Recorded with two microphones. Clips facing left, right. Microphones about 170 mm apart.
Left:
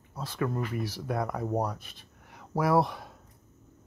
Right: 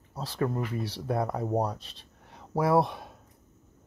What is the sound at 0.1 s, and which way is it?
Speech, 35° right (ahead or behind).